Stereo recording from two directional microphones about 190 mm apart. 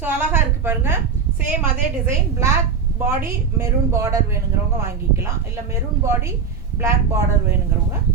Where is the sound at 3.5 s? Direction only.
15° right (ahead or behind).